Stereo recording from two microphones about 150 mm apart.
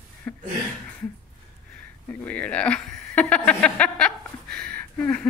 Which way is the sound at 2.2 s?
10° left (ahead or behind).